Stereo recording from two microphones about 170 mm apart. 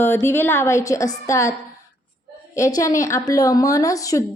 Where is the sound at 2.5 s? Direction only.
20° left (ahead or behind).